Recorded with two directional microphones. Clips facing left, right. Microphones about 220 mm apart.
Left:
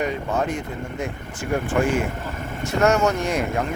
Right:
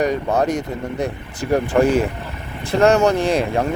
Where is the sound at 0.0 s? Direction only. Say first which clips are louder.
Right 5 dB; 40° right (ahead or behind).